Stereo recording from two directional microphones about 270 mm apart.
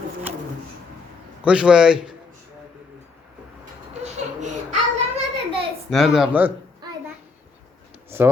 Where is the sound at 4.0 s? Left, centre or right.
Right.